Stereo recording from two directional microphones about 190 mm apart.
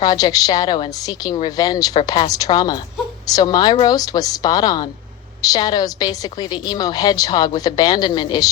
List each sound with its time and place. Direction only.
0.0 s a woman's voice: 20° left (ahead or behind)